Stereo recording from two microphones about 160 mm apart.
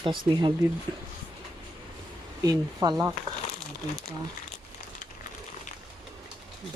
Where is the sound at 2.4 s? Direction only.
25° right (ahead or behind).